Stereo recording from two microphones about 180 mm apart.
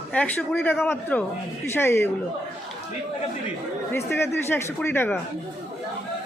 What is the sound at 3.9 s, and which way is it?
A man's voice, 15° left (ahead or behind).